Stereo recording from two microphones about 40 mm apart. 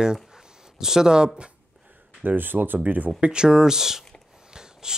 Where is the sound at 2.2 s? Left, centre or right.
Right.